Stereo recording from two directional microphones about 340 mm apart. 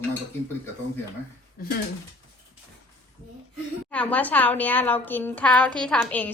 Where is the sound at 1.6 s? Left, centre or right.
Left.